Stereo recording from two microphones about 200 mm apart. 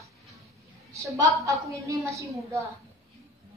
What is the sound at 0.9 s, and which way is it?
A woman's voice, 15° right (ahead or behind).